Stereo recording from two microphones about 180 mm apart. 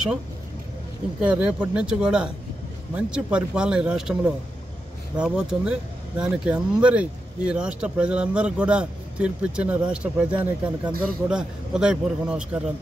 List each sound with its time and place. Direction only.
1.2 s speech: 5° right (ahead or behind)